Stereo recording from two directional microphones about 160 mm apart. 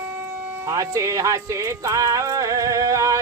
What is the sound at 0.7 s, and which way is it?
Music, 20° right (ahead or behind).